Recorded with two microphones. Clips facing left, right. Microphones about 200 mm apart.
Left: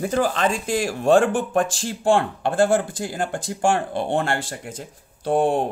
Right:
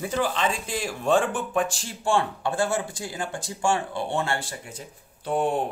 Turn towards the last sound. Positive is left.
turn(degrees=45)  # may be behind; listen again after turning